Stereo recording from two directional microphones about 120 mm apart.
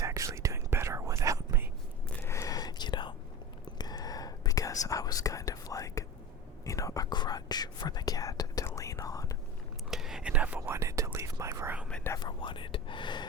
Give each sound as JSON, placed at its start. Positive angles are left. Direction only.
{"t": 0.0, "sound": "whispering", "side_deg": -25}
{"t": 2.0, "sound": "whispering", "side_deg": 20}
{"t": 9.9, "sound": "whispering", "side_deg": -5}
{"t": 10.8, "sound": "whispering", "side_deg": -25}
{"t": 12.2, "sound": "whispering", "side_deg": 45}